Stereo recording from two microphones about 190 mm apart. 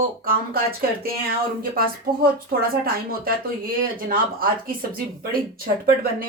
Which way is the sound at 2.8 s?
50° right (ahead or behind).